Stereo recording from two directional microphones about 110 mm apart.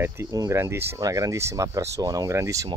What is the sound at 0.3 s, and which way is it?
Speech, 35° right (ahead or behind).